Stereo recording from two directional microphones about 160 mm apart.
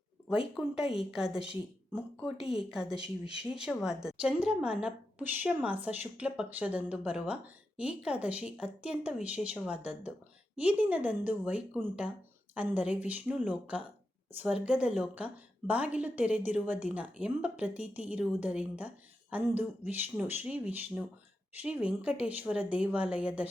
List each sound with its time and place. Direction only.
0.3 s speech: 5° right (ahead or behind)
2.4 s speech: 35° left (ahead or behind)
2.6 s a woman's voice: 5° right (ahead or behind)